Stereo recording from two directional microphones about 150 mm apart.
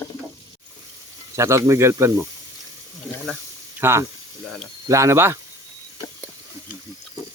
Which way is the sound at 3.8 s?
15° right (ahead or behind).